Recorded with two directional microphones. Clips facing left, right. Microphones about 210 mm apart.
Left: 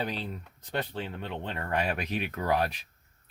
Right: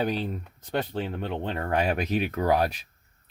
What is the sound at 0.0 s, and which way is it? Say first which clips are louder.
Speech: right 6 dB; 45° right (ahead or behind).